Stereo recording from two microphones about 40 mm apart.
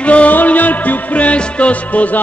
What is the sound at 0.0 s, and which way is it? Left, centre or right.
Music, left.